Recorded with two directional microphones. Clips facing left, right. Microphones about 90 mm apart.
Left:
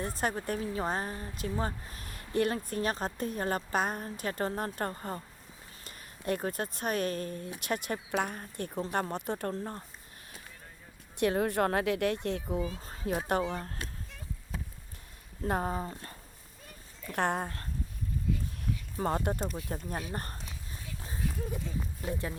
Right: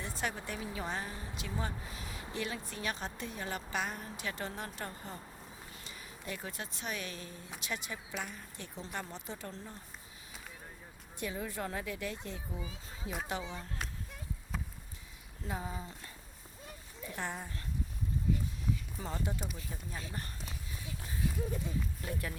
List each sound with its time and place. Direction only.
0.2 s speech: 45° left (ahead or behind)
11.2 s speech: 65° left (ahead or behind)
12.8 s speech: 50° left (ahead or behind)
15.4 s speech: 55° left (ahead or behind)
18.6 s a sound: 60° left (ahead or behind)
19.5 s speech: 60° left (ahead or behind)
21.8 s speech: 25° left (ahead or behind)